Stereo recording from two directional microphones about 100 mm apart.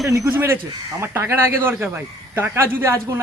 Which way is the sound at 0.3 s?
20° right (ahead or behind).